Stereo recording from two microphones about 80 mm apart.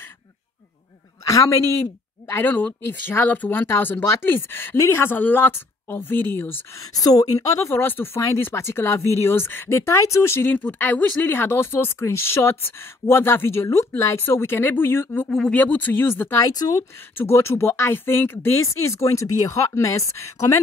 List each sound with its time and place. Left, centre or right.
1.2 s a woman's voice: left
2.4 s speech: left
6.8 s speech: left
7.7 s speech: left
16.3 s speech: left
17.2 s speech: left